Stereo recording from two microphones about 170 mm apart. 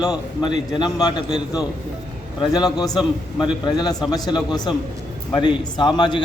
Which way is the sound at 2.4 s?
25° left (ahead or behind).